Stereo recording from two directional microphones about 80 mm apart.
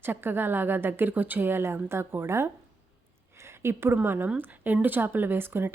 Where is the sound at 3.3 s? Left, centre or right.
Right.